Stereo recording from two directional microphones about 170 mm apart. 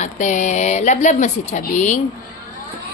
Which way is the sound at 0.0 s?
45° left (ahead or behind).